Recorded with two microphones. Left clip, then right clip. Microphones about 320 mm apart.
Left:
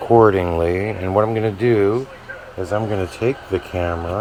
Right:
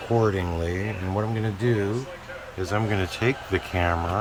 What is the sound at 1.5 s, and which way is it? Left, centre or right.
Speech, centre.